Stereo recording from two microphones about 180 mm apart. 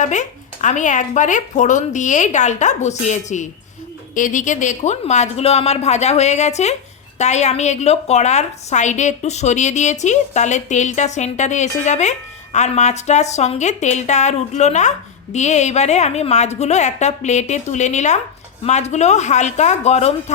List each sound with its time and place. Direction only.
0.0 s a woman's voice: 40° left (ahead or behind)